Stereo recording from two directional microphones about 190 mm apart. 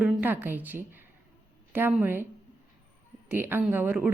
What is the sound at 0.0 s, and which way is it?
A woman's voice, 10° right (ahead or behind).